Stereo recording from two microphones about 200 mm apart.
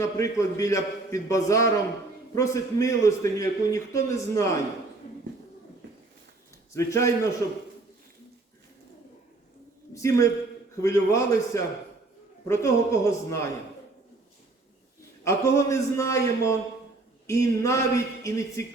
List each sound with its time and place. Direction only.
0.0 s a man's voice: 15° left (ahead or behind)
6.7 s a man's voice: 15° left (ahead or behind)
9.9 s a man's voice: 15° left (ahead or behind)
15.2 s a man's voice: 15° left (ahead or behind)